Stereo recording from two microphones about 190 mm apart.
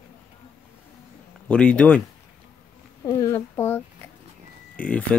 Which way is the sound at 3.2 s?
15° left (ahead or behind).